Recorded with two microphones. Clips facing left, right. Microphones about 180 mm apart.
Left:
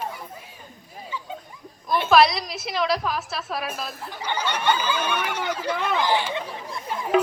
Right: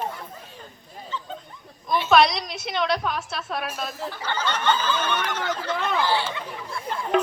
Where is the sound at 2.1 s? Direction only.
Centre (ahead or behind).